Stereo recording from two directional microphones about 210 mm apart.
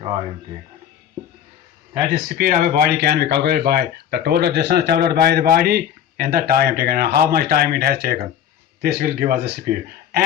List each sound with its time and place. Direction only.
2.3 s speech: 40° right (ahead or behind)